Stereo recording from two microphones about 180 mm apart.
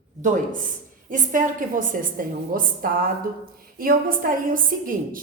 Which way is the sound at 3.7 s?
50° right (ahead or behind).